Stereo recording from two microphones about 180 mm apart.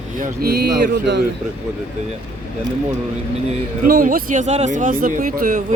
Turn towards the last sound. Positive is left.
turn(degrees=-50)  # may be behind; listen again after turning